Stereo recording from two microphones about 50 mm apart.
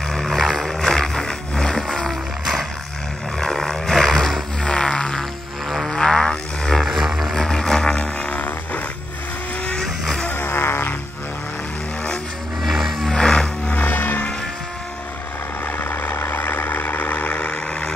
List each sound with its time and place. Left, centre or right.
0.1 s a sound: centre
3.3 s roaring cats: centre
4.6 s music: centre
5.7 s a sound: centre
5.9 s a sound: centre
6.8 s music: centre
7.3 s music: centre
8.0 s a sound: left
9.8 s vehicle: centre
10.3 s music: left
12.6 s music: centre
13.1 s music: centre
13.7 s music: left
15.9 s vehicle: left; by 17.9 s centre